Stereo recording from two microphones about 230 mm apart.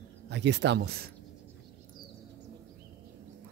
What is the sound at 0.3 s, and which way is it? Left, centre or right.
Speech, right.